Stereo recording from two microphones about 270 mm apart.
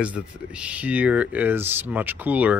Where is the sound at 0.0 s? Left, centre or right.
Centre.